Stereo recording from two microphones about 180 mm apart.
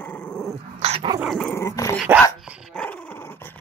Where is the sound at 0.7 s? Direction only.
35° right (ahead or behind).